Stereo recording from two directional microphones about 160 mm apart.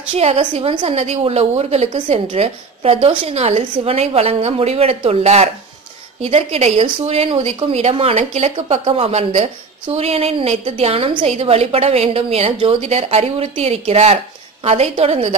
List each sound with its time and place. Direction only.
0.1 s a woman's voice: 40° right (ahead or behind)